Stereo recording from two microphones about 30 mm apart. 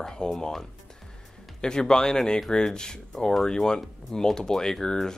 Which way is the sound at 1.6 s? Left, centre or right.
Left.